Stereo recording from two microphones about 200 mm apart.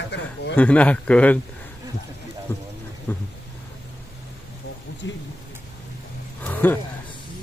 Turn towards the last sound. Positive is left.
turn(degrees=10)  # may be behind; listen again after turning